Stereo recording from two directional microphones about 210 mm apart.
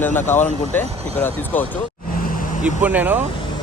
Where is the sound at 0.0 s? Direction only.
10° left (ahead or behind).